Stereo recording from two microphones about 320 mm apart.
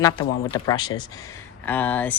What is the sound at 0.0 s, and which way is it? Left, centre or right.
Speech, centre.